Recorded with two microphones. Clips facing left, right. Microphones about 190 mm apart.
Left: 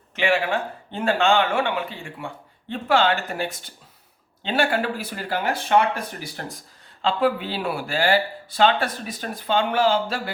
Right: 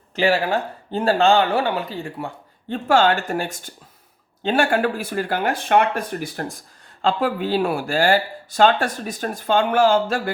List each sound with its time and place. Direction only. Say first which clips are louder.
0.2 s speech: right 3 dB; 35° right (ahead or behind); by 6.4 s 55° right (ahead or behind)
7.0 s speech: right 1 dB; 45° right (ahead or behind)